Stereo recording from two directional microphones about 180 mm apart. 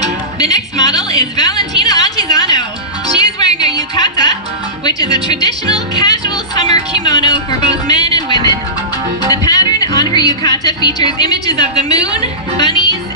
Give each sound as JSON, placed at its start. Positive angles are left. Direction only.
{"t": 0.4, "sound": "a woman's voice", "side_deg": 20}
{"t": 3.2, "sound": "music", "side_deg": 20}
{"t": 4.8, "sound": "a woman's voice", "side_deg": 20}